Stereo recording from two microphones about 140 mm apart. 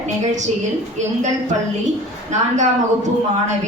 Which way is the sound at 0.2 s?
60° right (ahead or behind).